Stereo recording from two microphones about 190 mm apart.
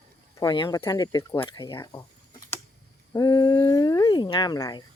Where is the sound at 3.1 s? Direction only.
20° left (ahead or behind).